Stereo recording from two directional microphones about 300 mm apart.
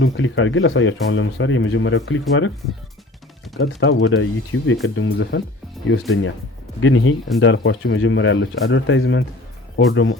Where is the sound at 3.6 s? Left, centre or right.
Left.